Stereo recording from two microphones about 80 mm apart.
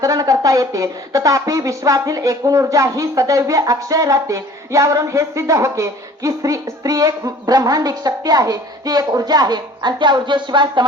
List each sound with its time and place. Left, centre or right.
0.0 s speech: right